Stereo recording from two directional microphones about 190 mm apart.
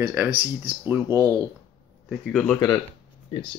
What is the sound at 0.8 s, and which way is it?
Speech, 15° right (ahead or behind).